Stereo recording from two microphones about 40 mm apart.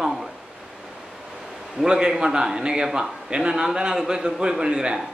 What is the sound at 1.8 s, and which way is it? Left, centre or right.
A man's voice, centre.